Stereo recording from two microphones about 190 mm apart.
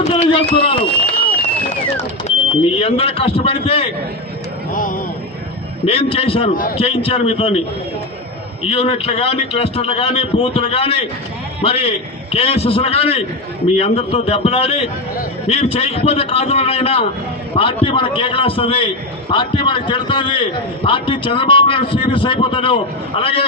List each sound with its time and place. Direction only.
0.0 s speech: 30° left (ahead or behind)
2.2 s a man's voice: 30° left (ahead or behind)
4.7 s speech: 45° left (ahead or behind)
5.8 s a man's voice: 30° left (ahead or behind)
6.5 s speech: 45° left (ahead or behind)
6.7 s a man's voice: 30° left (ahead or behind)
8.6 s a man's voice: 30° left (ahead or behind)